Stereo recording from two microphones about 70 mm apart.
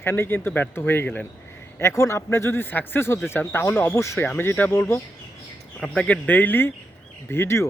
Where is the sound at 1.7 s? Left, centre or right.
Left.